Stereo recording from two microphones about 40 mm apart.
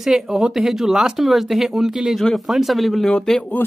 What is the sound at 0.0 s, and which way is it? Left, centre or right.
Speech, centre.